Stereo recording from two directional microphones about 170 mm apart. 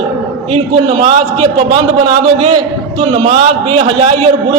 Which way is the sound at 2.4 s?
35° right (ahead or behind).